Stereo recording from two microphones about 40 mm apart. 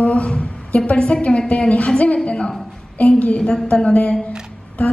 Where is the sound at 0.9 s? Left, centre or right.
Left.